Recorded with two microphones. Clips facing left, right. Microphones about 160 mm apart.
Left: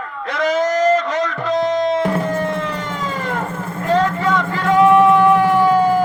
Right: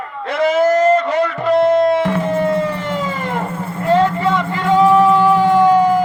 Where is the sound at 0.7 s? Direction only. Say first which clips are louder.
Right 3 dB; 30° right (ahead or behind).